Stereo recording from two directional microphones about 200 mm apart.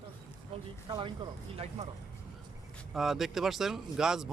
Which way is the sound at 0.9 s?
25° right (ahead or behind).